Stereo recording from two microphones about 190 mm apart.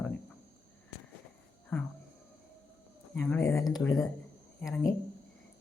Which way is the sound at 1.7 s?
10° left (ahead or behind).